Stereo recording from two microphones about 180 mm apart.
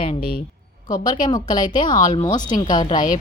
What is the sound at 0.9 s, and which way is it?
A woman's voice, 20° left (ahead or behind).